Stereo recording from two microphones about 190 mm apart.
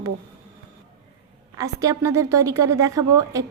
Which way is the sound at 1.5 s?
20° right (ahead or behind).